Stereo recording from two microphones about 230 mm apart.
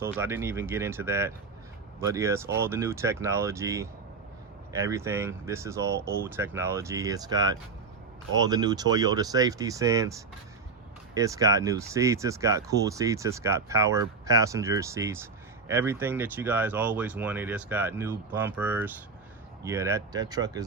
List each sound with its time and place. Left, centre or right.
0.0 s speech: centre